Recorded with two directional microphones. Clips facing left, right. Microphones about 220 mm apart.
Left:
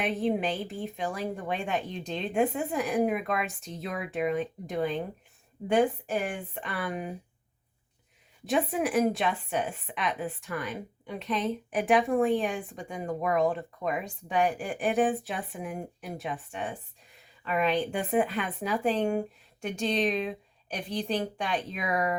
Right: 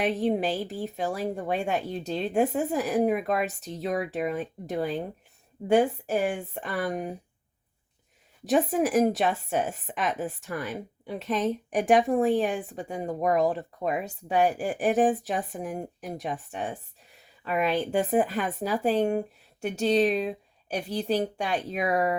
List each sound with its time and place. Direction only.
0.2 s speech: 40° right (ahead or behind)
6.5 s speech: 40° right (ahead or behind)
8.4 s speech: 45° right (ahead or behind)
17.7 s speech: 40° right (ahead or behind)